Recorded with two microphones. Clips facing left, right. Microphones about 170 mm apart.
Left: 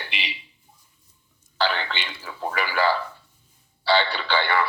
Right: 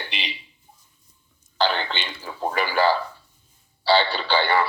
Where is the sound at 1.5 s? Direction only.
35° right (ahead or behind).